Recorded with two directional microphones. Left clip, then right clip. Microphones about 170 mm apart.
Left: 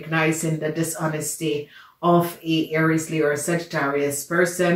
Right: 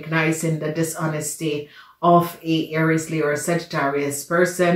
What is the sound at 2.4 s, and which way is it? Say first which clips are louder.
Speech: even; 25° right (ahead or behind).